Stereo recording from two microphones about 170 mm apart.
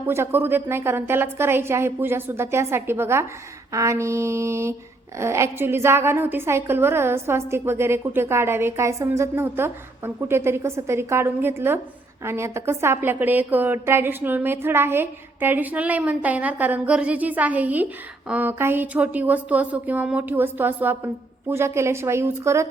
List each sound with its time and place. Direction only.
0.1 s a woman's voice: 15° right (ahead or behind)